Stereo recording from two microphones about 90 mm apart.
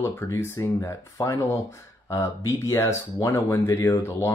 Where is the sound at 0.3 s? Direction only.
30° left (ahead or behind).